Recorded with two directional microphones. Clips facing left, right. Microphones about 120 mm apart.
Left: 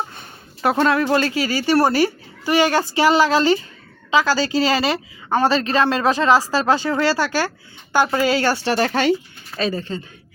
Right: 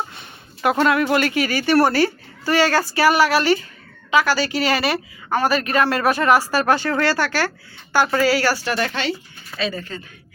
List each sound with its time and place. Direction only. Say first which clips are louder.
0.6 s speech: even; 30° left (ahead or behind)